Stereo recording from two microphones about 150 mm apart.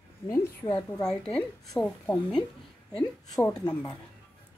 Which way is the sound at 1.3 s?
5° left (ahead or behind).